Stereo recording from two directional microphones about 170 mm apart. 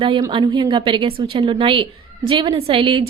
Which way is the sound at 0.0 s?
30° right (ahead or behind).